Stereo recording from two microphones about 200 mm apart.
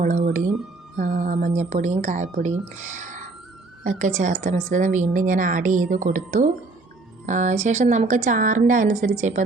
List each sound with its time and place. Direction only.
0.0 s a woman's voice: 40° right (ahead or behind)